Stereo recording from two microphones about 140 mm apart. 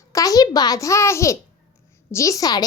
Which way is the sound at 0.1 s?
25° left (ahead or behind).